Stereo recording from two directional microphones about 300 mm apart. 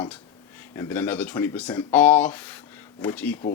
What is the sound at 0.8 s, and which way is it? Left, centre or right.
Speech, centre.